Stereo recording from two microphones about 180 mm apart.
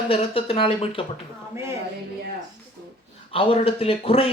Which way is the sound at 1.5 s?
15° right (ahead or behind).